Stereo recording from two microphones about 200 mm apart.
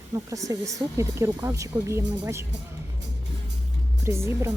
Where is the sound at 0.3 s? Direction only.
15° right (ahead or behind).